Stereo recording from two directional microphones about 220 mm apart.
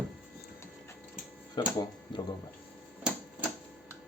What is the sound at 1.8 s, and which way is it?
Speech, 20° left (ahead or behind).